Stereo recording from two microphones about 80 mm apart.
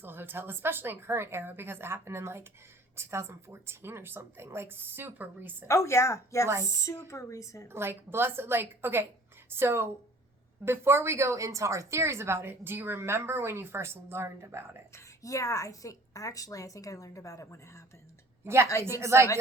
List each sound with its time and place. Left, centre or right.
0.0 s speech: right
5.6 s a woman's voice: left
7.7 s a woman's voice: right
14.9 s a woman's voice: left
18.4 s a woman's voice: right
18.7 s a woman's voice: left
18.9 s a woman's voice: right